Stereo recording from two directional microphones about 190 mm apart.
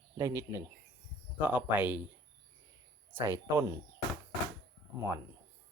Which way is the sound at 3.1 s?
15° right (ahead or behind).